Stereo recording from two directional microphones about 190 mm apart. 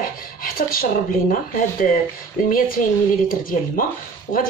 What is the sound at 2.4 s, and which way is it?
Speech, 45° left (ahead or behind).